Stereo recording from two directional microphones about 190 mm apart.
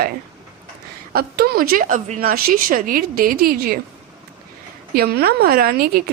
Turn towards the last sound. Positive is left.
turn(degrees=-50)  # may be behind; listen again after turning